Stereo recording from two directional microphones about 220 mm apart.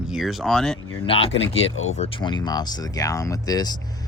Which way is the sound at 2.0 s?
20° left (ahead or behind).